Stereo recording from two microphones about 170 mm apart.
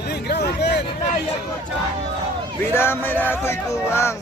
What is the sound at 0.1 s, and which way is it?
Hubbub, 75° left (ahead or behind).